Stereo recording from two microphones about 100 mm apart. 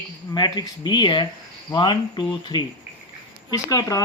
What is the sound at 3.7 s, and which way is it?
Speech, 35° left (ahead or behind).